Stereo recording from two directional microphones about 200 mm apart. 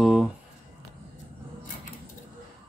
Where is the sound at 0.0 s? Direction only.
5° right (ahead or behind).